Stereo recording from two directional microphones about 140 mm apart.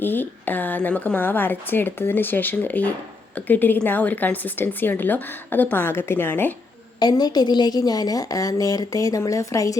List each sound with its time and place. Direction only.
0.0 s speech: 15° left (ahead or behind)
7.0 s a woman's voice: 30° left (ahead or behind)